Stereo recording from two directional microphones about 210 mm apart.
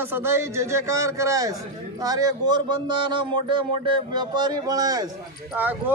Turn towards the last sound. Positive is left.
turn(degrees=-10)  # may be behind; listen again after turning